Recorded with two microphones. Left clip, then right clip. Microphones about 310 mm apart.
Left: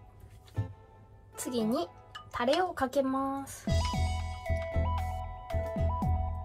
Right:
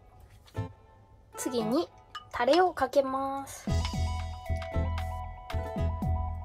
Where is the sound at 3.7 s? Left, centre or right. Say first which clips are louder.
Left 3 dB; centre.